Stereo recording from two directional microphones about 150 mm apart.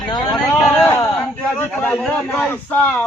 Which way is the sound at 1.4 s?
15° left (ahead or behind).